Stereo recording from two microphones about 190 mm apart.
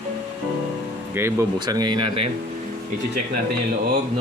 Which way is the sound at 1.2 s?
15° right (ahead or behind).